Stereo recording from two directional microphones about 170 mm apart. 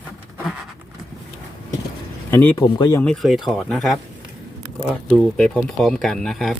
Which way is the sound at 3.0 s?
5° left (ahead or behind).